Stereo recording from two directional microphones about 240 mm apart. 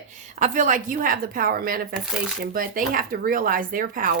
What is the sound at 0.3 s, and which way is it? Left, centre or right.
Speech, right.